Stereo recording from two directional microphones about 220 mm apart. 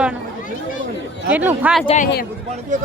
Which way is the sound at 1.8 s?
30° left (ahead or behind).